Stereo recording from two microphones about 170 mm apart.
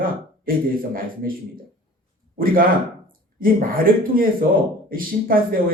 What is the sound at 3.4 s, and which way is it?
A man's voice, 55° right (ahead or behind).